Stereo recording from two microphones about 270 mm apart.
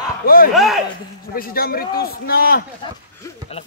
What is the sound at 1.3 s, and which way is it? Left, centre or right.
Speech, left.